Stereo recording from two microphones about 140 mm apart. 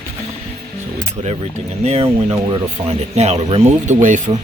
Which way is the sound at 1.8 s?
50° right (ahead or behind).